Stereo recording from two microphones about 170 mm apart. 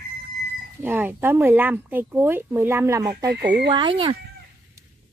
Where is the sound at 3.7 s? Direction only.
25° right (ahead or behind).